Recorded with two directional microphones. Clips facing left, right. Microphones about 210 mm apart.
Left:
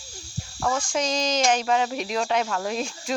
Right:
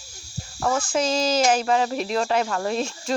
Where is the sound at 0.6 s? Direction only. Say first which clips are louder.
Right 3 dB; 5° right (ahead or behind).